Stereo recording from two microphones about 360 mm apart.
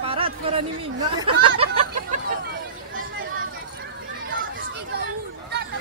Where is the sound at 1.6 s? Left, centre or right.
Centre.